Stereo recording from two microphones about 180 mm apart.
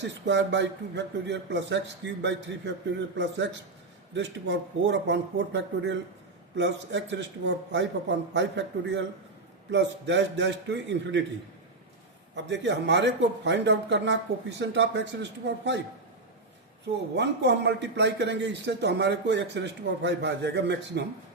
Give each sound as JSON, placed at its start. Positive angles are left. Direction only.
{"t": 0.0, "sound": "a man's voice", "side_deg": -75}
{"t": 12.3, "sound": "a man's voice", "side_deg": -75}
{"t": 17.2, "sound": "a man's voice", "side_deg": -75}